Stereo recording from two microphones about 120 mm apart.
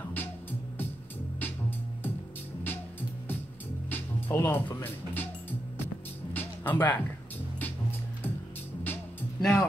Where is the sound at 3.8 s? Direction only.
15° left (ahead or behind).